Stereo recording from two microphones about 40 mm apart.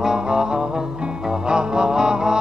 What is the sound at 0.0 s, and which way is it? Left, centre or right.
Music, centre.